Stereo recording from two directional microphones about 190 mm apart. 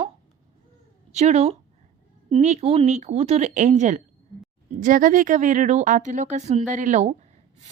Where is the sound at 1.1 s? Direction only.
35° right (ahead or behind).